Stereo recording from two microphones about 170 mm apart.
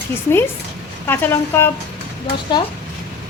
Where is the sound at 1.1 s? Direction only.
10° left (ahead or behind).